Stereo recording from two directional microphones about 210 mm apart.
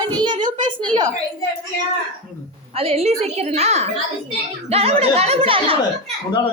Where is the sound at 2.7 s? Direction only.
25° right (ahead or behind).